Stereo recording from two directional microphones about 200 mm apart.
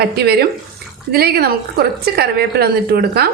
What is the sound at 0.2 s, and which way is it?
A woman's voice, 55° right (ahead or behind).